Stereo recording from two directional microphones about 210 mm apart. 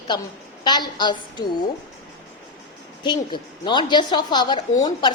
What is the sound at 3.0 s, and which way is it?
A woman's voice, 20° left (ahead or behind).